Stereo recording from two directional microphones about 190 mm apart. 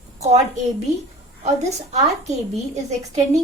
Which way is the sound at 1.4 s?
35° right (ahead or behind).